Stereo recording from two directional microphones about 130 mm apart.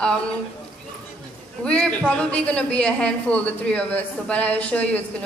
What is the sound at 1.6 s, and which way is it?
A woman's voice, 10° left (ahead or behind).